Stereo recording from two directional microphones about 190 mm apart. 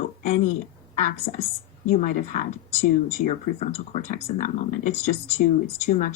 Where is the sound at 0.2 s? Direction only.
40° left (ahead or behind).